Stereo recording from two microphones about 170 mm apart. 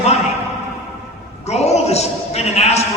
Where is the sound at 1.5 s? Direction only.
40° left (ahead or behind).